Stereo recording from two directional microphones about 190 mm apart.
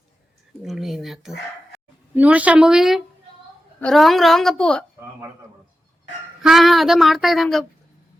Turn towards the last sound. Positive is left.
turn(degrees=0)  # may be behind; listen again after turning